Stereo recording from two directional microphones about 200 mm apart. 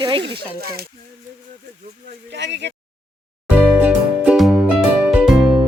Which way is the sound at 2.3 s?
60° right (ahead or behind).